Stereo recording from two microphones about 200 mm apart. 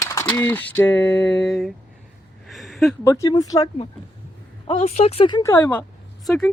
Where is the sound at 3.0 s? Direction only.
15° left (ahead or behind).